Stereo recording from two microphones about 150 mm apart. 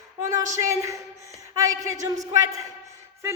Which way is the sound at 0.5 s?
20° right (ahead or behind).